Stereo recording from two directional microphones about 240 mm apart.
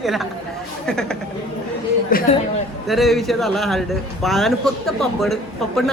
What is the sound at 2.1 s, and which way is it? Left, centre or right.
Speech, left.